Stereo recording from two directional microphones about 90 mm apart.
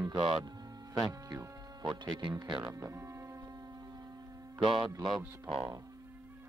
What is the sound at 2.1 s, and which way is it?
Speech, 55° right (ahead or behind).